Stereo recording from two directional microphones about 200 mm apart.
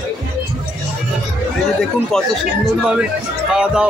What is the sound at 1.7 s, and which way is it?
Speech, centre (ahead or behind).